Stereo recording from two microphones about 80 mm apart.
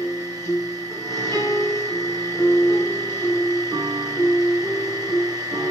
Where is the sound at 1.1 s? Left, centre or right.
Right.